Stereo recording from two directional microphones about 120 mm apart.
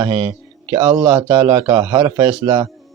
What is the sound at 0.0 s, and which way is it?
Speech, 25° right (ahead or behind).